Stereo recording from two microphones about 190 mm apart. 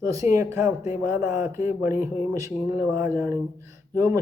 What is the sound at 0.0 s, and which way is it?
Speech, 15° right (ahead or behind).